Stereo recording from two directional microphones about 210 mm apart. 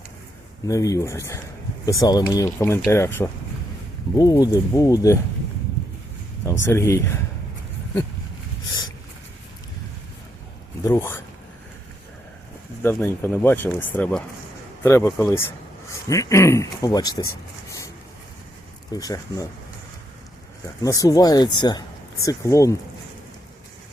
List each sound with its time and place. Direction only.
0.7 s speech: 15° left (ahead or behind)
6.4 s speech: 15° left (ahead or behind)
10.8 s speech: 10° left (ahead or behind)
12.8 s speech: 10° left (ahead or behind)
17.7 s a sound: 15° left (ahead or behind)
18.9 s speech: 15° left (ahead or behind)
20.8 s speech: 15° left (ahead or behind)